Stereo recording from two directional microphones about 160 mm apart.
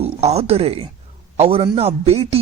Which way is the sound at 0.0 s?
40° right (ahead or behind).